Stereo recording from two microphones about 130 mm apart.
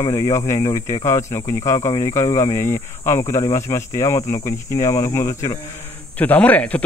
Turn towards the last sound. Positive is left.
turn(degrees=10)  # may be behind; listen again after turning